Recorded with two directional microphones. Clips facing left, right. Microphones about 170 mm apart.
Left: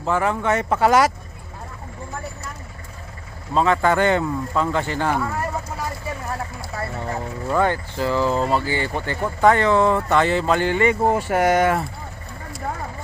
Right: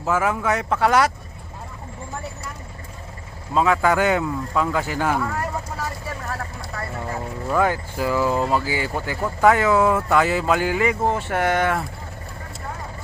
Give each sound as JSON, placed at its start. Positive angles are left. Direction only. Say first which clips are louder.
{"t": 0.0, "sound": "speech", "louder": "even", "side_deg": -5}
{"t": 3.5, "sound": "speech", "louder": "even", "side_deg": -5}
{"t": 6.2, "sound": "vehicle", "louder": "left 2 dB", "side_deg": 20}
{"t": 7.4, "sound": "speech", "louder": "even", "side_deg": -5}